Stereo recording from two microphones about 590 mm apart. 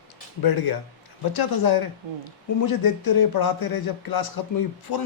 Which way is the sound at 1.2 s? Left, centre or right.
Left.